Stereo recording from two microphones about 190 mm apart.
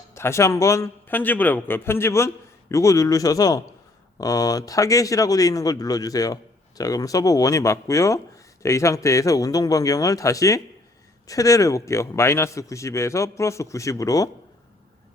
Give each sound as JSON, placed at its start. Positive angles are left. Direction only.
{"t": 0.1, "sound": "speech", "side_deg": 15}